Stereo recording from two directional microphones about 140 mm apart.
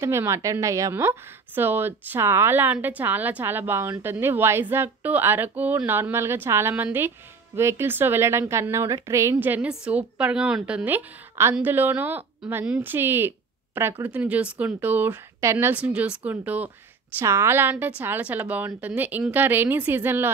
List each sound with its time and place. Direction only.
0.0 s a woman's voice: 20° right (ahead or behind)